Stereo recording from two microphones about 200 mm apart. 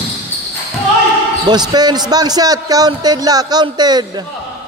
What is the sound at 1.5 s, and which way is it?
A man's voice, 20° right (ahead or behind).